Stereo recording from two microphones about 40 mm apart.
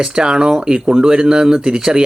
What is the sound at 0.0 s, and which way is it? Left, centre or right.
Speech, centre.